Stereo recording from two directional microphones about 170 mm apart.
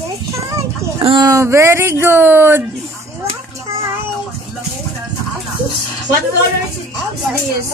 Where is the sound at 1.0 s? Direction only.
25° right (ahead or behind).